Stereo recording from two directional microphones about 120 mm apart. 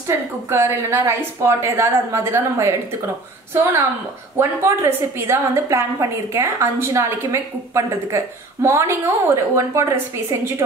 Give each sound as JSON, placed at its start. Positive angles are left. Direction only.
{"t": 0.0, "sound": "a woman's voice", "side_deg": -20}
{"t": 4.4, "sound": "a woman's voice", "side_deg": -20}